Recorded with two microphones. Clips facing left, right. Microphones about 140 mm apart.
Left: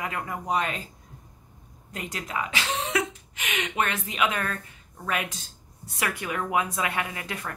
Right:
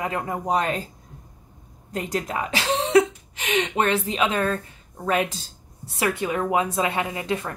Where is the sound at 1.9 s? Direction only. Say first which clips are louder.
Right 6 dB; 35° right (ahead or behind).